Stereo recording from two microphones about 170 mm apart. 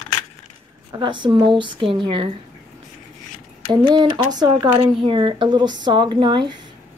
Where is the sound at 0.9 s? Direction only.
25° right (ahead or behind).